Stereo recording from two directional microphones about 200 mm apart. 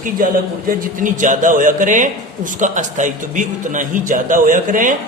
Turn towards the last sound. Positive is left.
turn(degrees=-40)  # may be behind; listen again after turning